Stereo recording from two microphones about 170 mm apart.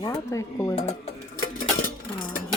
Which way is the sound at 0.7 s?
40° left (ahead or behind).